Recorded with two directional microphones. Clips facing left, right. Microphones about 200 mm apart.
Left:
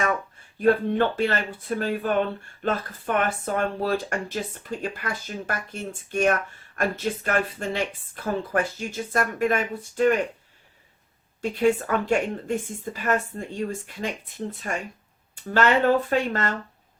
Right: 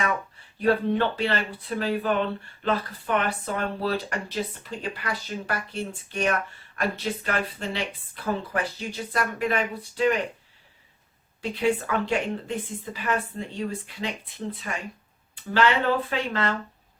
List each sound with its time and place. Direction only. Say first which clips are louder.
0.6 s speech: left 2 dB; 45° left (ahead or behind)
11.4 s speech: left 3 dB; 45° left (ahead or behind)
15.5 s speech: left 3 dB; 45° left (ahead or behind)